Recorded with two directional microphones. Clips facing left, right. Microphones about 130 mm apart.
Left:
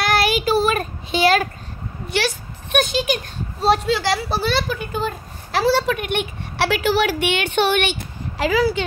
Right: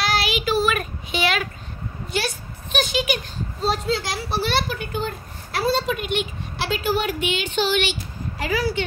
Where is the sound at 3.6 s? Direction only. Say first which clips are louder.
Left 6 dB; 75° left (ahead or behind).